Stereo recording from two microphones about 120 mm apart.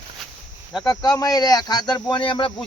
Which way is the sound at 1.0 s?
30° left (ahead or behind).